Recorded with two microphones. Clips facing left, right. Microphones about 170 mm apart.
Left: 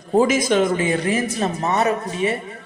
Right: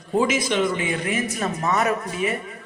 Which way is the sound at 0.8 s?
35° left (ahead or behind).